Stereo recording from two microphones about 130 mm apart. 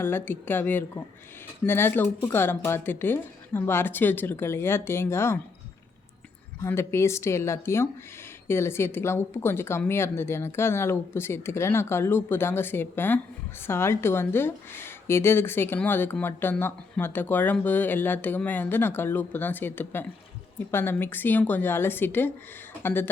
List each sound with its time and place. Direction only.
0.0 s speech: 15° left (ahead or behind)
6.6 s a woman's voice: 20° left (ahead or behind)